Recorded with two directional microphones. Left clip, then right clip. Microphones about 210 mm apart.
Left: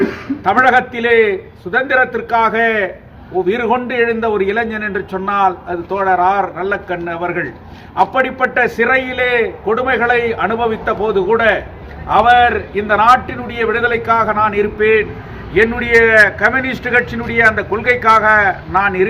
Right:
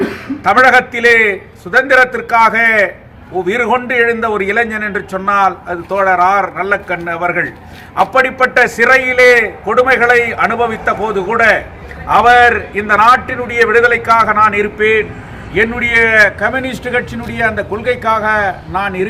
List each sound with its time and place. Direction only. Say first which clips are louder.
0.4 s a man's voice: right 3 dB; 15° right (ahead or behind)